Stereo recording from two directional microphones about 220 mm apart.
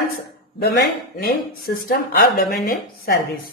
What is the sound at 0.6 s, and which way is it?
Speech, 45° left (ahead or behind).